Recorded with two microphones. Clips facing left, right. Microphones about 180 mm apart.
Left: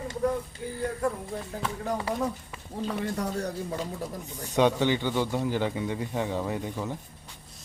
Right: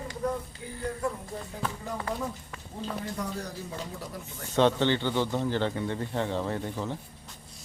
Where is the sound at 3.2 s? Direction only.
65° left (ahead or behind).